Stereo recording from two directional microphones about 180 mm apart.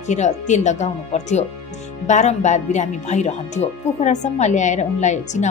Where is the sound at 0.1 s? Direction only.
40° left (ahead or behind).